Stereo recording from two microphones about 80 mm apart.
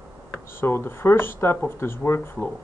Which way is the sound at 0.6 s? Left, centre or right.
Left.